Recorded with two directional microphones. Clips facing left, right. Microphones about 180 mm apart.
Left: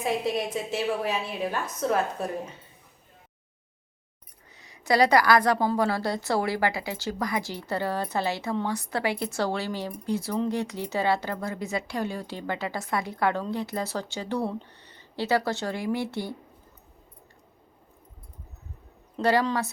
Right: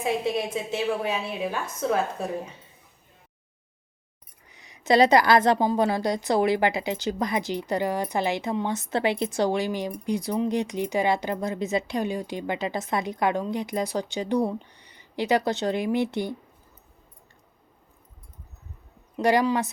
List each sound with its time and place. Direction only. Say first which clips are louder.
0.0 s a woman's voice: right 1 dB; centre (ahead or behind)
4.5 s a woman's voice: right 3 dB; 20° right (ahead or behind)
19.1 s speech: right 2 dB; 15° right (ahead or behind)